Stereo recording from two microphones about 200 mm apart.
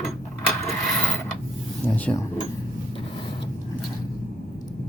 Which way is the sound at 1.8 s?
10° left (ahead or behind).